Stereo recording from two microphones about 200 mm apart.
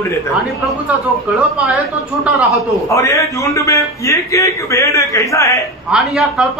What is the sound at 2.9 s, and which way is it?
A man's voice, 15° left (ahead or behind).